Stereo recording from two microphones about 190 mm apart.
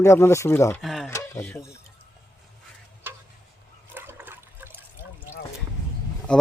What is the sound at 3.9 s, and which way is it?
Toilet flush, 10° right (ahead or behind).